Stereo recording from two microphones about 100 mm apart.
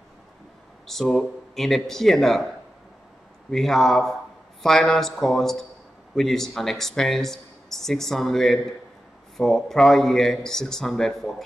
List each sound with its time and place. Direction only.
0.8 s speech: 5° left (ahead or behind)
3.4 s speech: 5° left (ahead or behind)